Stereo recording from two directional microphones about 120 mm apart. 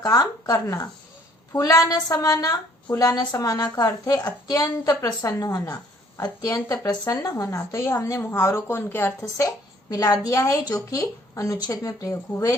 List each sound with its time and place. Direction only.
0.0 s a woman's voice: 30° left (ahead or behind)
9.9 s speech: 30° left (ahead or behind)